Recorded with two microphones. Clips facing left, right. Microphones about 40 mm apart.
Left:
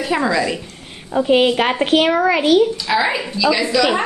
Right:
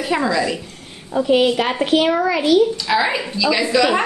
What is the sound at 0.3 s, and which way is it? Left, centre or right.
Speech, centre.